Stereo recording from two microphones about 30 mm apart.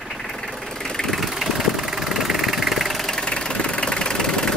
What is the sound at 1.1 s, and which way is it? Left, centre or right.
Vehicle, centre.